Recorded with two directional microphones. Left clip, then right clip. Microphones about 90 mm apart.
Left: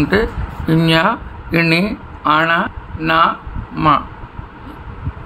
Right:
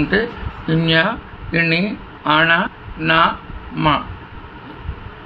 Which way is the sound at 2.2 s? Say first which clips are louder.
Left 1 dB; 25° left (ahead or behind).